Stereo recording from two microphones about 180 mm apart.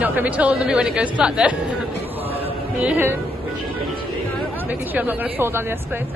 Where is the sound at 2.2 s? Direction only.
30° right (ahead or behind).